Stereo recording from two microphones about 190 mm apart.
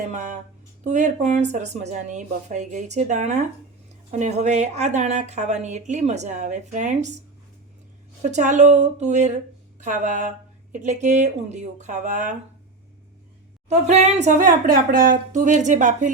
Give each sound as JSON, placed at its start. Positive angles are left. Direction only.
{"t": 0.1, "sound": "speech", "side_deg": -40}
{"t": 8.2, "sound": "speech", "side_deg": -40}
{"t": 13.7, "sound": "speech", "side_deg": -35}